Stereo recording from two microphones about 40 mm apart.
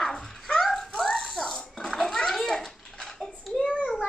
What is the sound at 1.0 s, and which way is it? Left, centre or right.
Giggle, centre.